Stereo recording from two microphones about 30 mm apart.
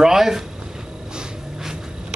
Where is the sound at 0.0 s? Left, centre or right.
Centre.